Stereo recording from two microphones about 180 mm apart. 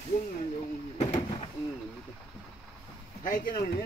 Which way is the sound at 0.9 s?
35° left (ahead or behind).